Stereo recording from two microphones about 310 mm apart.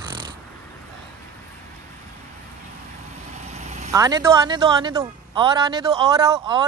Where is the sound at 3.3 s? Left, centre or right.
Right.